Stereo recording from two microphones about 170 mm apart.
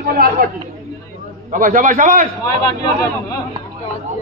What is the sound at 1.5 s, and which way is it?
Speech, 50° right (ahead or behind).